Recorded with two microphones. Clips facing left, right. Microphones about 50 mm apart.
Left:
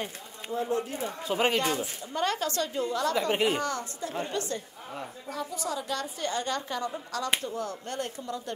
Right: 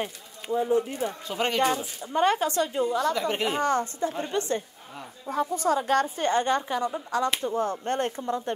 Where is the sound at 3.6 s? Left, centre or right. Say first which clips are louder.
Right 8 dB; right.